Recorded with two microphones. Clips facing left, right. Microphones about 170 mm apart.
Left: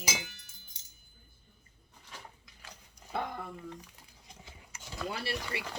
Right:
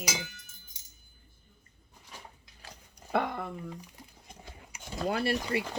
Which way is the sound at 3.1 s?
75° right (ahead or behind).